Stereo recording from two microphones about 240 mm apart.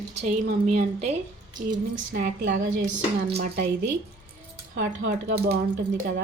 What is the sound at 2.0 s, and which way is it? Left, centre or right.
Speech, right.